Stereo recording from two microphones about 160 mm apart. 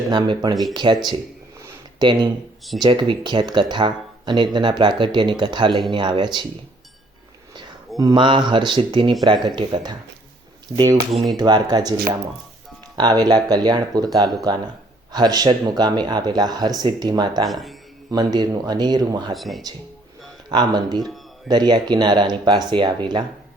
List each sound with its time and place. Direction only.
0.1 s speech: 25° right (ahead or behind)
1.6 s a sound: 30° right (ahead or behind)
2.8 s speech: 30° right (ahead or behind)
7.9 s speech: 25° right (ahead or behind)
11.3 s speech: 25° right (ahead or behind)
17.5 s speech: centre (ahead or behind)
18.1 s speech: 25° right (ahead or behind)
19.3 s speech: centre (ahead or behind)
20.5 s speech: 25° right (ahead or behind)